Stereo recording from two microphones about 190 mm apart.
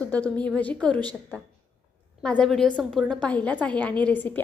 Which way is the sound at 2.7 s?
5° right (ahead or behind).